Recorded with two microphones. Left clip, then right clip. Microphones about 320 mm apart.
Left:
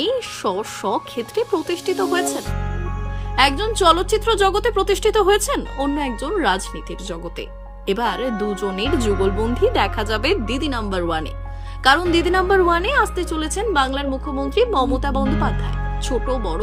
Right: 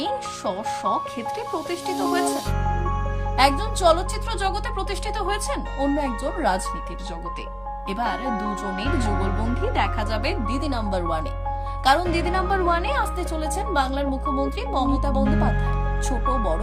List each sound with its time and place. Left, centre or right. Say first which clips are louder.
0.0 s a woman's voice: left 5 dB; centre
3.3 s a woman's voice: left 3 dB; centre
7.9 s a woman's voice: left 5 dB; centre